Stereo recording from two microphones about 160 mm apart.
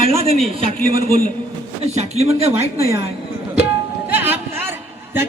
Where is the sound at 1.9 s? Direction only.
40° right (ahead or behind).